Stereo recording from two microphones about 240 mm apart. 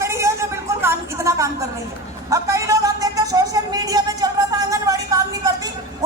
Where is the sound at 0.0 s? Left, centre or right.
Centre.